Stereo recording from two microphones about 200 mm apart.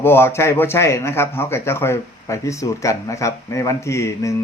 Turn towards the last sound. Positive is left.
turn(degrees=15)  # may be behind; listen again after turning